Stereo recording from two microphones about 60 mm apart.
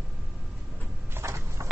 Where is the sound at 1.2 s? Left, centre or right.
Right.